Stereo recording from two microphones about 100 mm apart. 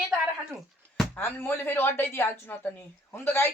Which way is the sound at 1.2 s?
20° left (ahead or behind).